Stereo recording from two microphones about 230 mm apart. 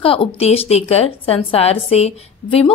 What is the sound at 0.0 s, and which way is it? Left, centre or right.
A woman's voice, left.